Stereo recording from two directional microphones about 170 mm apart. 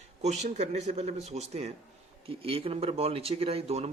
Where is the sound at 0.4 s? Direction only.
40° right (ahead or behind).